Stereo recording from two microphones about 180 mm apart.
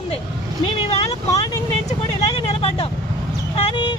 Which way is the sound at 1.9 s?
30° left (ahead or behind).